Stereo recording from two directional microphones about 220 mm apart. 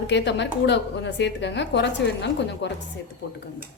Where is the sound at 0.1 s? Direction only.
55° left (ahead or behind).